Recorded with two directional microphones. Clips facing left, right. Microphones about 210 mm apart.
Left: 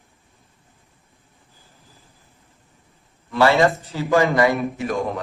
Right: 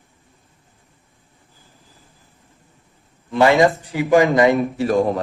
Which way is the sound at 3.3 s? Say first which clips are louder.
Right 2 dB; 15° right (ahead or behind).